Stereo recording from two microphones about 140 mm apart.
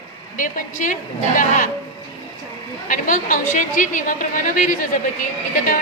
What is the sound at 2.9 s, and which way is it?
A woman's voice, 70° left (ahead or behind).